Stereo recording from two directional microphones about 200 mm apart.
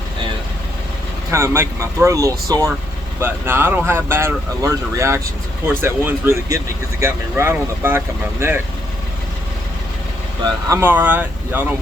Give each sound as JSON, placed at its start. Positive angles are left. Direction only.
{"t": 1.3, "sound": "speech", "side_deg": -15}
{"t": 10.7, "sound": "speech", "side_deg": -10}